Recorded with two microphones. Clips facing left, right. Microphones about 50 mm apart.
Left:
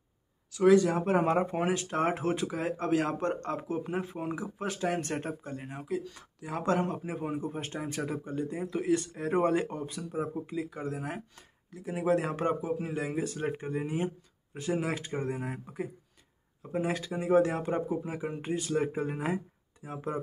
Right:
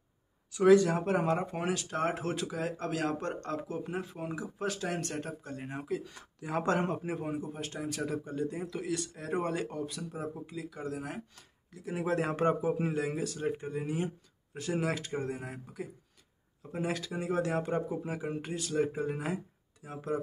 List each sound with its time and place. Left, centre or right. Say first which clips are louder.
0.7 s speech: even; centre
1.1 s speech: left 4 dB; left
5.0 s speech: left 3 dB; left
5.6 s speech: right 2 dB; centre
7.5 s speech: left 2 dB; left; by 12.7 s centre
12.9 s speech: even; centre
13.2 s speech: left 1 dB; left
16.7 s speech: left 3 dB; centre